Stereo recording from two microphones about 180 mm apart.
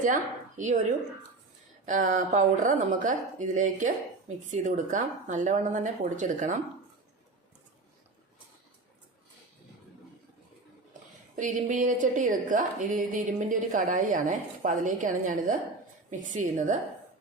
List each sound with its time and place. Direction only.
0.0 s a woman's voice: 45° right (ahead or behind)
11.3 s speech: 45° right (ahead or behind)